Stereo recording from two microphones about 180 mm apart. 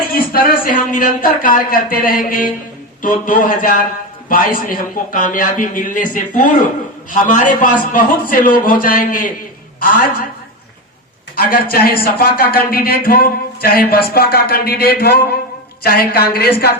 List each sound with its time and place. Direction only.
0.0 s speech: 55° left (ahead or behind)
11.3 s speech: 55° left (ahead or behind)